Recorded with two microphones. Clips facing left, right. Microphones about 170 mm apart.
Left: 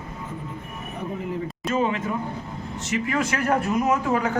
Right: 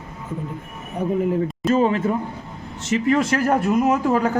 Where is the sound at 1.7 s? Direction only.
35° right (ahead or behind).